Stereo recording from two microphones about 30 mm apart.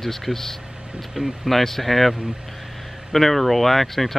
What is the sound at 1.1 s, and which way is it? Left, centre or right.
Speech, centre.